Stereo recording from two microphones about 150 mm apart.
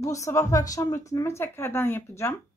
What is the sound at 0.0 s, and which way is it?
Speech, 20° left (ahead or behind).